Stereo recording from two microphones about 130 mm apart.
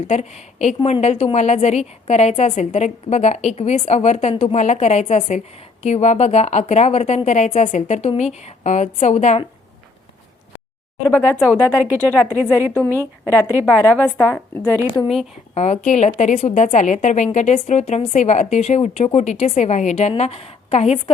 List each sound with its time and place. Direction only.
0.1 s a woman's voice: 60° left (ahead or behind)
11.0 s a woman's voice: 15° left (ahead or behind)
13.2 s a woman's voice: 20° left (ahead or behind)
15.0 s speech: 5° right (ahead or behind)
15.5 s a woman's voice: 55° left (ahead or behind)